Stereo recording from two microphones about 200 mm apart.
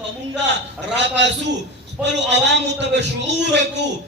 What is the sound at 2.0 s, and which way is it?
Speech, 5° right (ahead or behind).